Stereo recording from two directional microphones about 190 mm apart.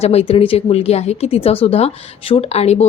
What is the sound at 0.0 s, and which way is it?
Speech, 35° left (ahead or behind).